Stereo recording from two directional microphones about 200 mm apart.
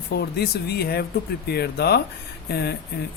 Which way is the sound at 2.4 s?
55° left (ahead or behind).